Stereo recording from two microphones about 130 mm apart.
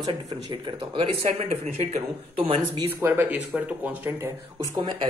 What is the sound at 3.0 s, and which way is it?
Speech, 20° right (ahead or behind).